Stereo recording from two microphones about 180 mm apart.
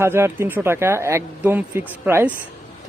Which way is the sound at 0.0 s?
15° right (ahead or behind).